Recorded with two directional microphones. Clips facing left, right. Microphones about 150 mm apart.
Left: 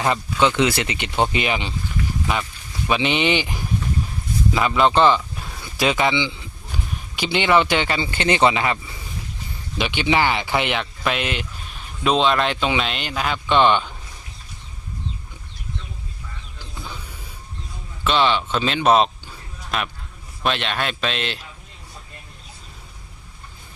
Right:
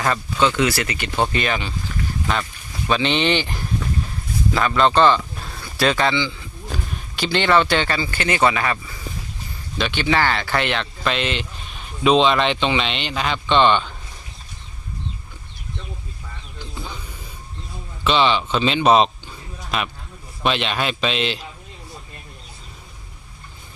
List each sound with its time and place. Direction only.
0.0 s speech: 15° left (ahead or behind)
18.0 s a man's voice: centre (ahead or behind)